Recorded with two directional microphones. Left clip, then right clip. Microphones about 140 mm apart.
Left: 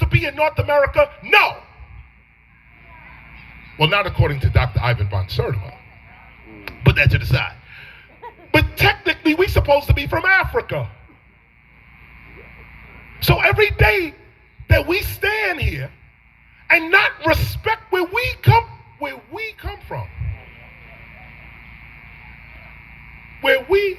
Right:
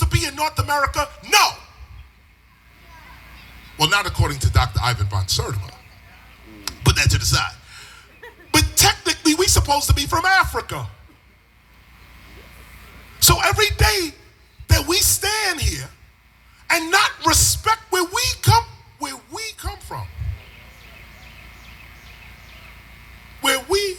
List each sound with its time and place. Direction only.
0.0 s speech: 30° right (ahead or behind)
3.8 s speech: 30° right (ahead or behind)
6.7 s a sound: 30° right (ahead or behind)
8.4 s music: 30° right (ahead or behind)
13.2 s speech: 25° right (ahead or behind)
23.4 s speech: 30° right (ahead or behind)